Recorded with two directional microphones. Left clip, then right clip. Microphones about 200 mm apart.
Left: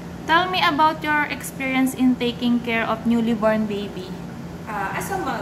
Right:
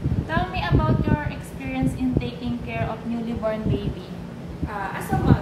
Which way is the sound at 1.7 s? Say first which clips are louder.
Left 4 dB; 25° left (ahead or behind).